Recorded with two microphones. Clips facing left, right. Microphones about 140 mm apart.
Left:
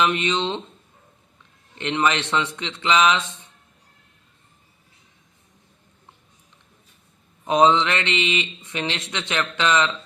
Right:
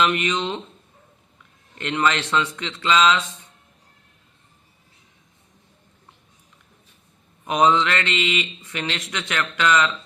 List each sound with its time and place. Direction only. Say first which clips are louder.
0.0 s speech: even; 25° left (ahead or behind)
1.8 s speech: even; 20° left (ahead or behind)
7.4 s speech: left 1 dB; 25° left (ahead or behind)